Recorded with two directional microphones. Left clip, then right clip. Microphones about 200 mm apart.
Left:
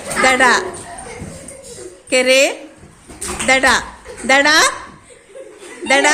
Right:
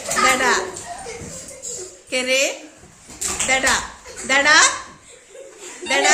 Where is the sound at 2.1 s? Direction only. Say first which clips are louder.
Left 7 dB; 35° left (ahead or behind).